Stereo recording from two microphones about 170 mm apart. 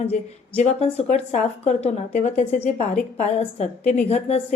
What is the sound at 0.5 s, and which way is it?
A woman's voice, 40° left (ahead or behind).